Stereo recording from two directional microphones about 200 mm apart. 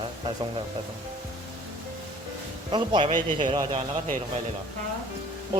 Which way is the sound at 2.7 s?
25° right (ahead or behind).